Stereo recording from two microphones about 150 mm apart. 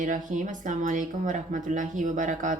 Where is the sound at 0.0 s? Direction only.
55° right (ahead or behind).